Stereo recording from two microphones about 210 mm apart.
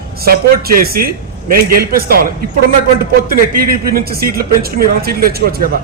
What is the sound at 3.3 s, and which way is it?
A man's voice, 45° right (ahead or behind).